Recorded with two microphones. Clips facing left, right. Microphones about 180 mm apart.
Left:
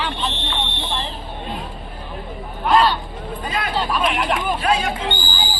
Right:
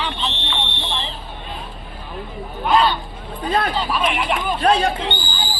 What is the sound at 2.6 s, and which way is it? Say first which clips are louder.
Speech: left 1 dB; centre (ahead or behind).